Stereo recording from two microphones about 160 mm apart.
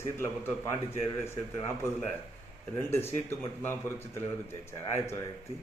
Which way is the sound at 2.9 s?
15° left (ahead or behind).